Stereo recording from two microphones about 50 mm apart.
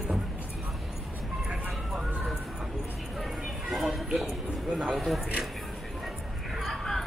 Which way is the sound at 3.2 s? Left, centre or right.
Centre.